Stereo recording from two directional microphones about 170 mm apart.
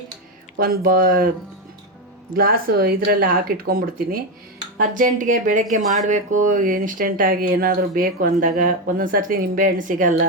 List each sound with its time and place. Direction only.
0.6 s speech: 60° right (ahead or behind)
2.3 s speech: 60° right (ahead or behind)